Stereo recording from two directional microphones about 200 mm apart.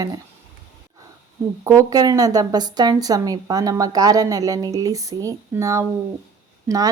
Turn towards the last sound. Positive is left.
turn(degrees=-15)  # may be behind; listen again after turning